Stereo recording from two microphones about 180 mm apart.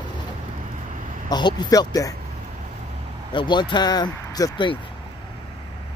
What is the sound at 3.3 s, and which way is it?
Speech, 25° left (ahead or behind).